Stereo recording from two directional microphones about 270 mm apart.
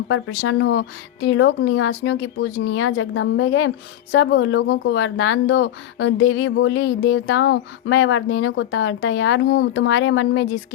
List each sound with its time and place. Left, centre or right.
0.1 s speech: left